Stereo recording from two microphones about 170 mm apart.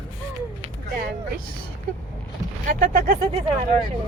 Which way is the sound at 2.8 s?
55° right (ahead or behind).